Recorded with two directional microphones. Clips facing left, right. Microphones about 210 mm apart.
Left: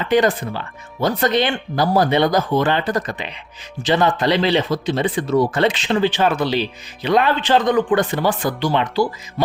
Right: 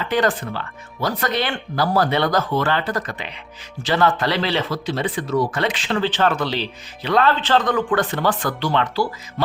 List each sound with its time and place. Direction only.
0.1 s speech: 15° left (ahead or behind)